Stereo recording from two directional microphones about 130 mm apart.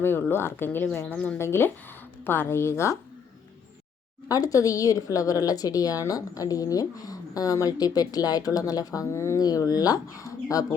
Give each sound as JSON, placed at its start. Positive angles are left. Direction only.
{"t": 0.0, "sound": "a woman's voice", "side_deg": 15}
{"t": 4.3, "sound": "a woman's voice", "side_deg": 25}